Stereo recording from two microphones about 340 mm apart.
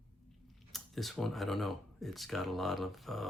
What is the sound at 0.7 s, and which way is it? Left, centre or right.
Speech, centre.